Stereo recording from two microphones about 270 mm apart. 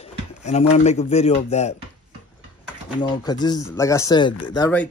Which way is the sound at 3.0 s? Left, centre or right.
Centre.